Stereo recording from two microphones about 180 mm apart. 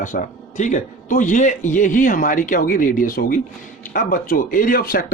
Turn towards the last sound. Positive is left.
turn(degrees=50)  # may be behind; listen again after turning